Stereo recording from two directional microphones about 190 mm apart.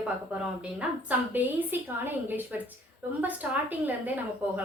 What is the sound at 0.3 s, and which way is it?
A woman's voice, 5° right (ahead or behind).